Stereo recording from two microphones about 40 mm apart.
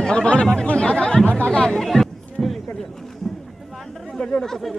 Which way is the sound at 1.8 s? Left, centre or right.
Centre.